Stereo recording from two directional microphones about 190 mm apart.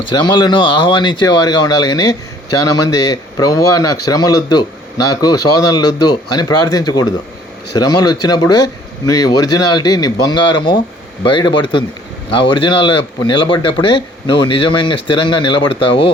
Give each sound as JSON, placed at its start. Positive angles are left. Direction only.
{"t": 0.1, "sound": "speech", "side_deg": 25}